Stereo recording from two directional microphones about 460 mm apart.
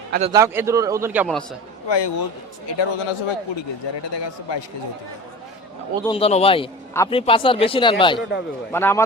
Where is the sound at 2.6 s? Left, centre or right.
Left.